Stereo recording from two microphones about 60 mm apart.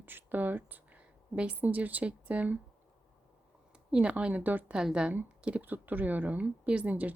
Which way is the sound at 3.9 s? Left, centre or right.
Centre.